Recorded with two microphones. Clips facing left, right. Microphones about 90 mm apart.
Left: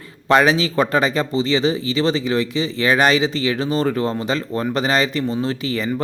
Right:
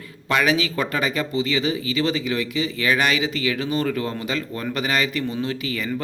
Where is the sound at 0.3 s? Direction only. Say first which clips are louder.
Left 5 dB; 35° left (ahead or behind).